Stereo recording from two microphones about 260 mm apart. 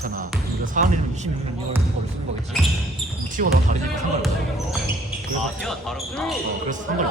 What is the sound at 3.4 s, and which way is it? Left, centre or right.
Speech, right.